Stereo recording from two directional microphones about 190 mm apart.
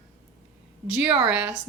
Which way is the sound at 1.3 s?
10° right (ahead or behind).